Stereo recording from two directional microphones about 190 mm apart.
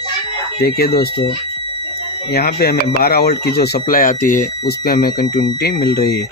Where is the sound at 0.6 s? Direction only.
55° left (ahead or behind).